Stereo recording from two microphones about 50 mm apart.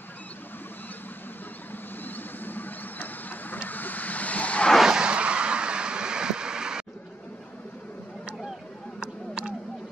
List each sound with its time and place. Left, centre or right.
2.0 s vehicle: left
4.8 s vehicle: centre
9.0 s a sound: centre